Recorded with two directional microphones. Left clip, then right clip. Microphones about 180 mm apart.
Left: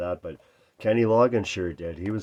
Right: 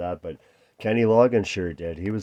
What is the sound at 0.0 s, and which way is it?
Speech, 35° right (ahead or behind).